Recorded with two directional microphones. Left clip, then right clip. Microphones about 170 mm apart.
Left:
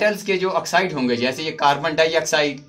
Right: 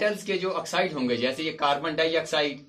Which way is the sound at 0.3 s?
40° left (ahead or behind).